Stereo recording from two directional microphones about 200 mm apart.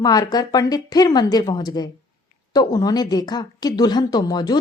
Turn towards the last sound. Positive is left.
turn(degrees=20)  # may be behind; listen again after turning